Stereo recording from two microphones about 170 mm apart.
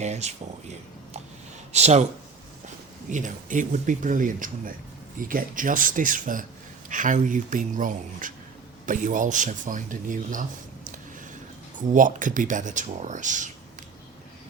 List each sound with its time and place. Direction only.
0.0 s speech: 40° right (ahead or behind)
1.7 s speech: 40° right (ahead or behind)
3.1 s speech: 45° right (ahead or behind)
11.8 s speech: 50° right (ahead or behind)